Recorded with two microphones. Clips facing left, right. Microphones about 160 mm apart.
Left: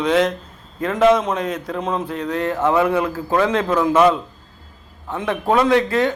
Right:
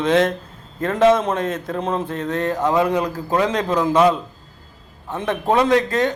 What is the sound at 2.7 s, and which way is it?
Speech, 20° right (ahead or behind).